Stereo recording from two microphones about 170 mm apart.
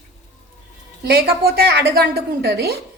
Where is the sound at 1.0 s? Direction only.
65° right (ahead or behind).